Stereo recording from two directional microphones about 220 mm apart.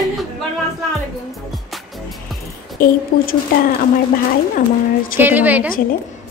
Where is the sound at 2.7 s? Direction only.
40° left (ahead or behind).